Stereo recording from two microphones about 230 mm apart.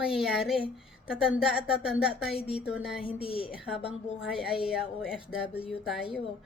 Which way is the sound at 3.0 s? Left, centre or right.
Left.